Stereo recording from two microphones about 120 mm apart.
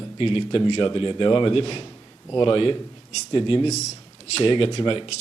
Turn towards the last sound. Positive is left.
turn(degrees=45)  # may be behind; listen again after turning